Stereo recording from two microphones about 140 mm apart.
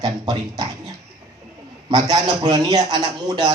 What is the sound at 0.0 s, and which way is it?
Speech, 30° right (ahead or behind).